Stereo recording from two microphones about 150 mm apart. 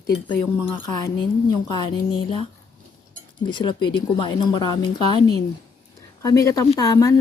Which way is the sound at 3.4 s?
30° left (ahead or behind).